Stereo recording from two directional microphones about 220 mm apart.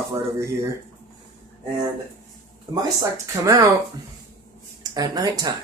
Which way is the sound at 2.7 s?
15° right (ahead or behind).